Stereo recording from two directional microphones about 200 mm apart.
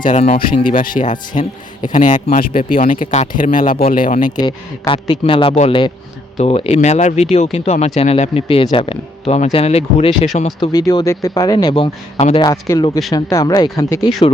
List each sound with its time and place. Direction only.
0.0 s speech: 35° left (ahead or behind)
0.7 s speech: 40° left (ahead or behind)
4.4 s a man's voice: 25° left (ahead or behind)
10.6 s a man's voice: 20° left (ahead or behind)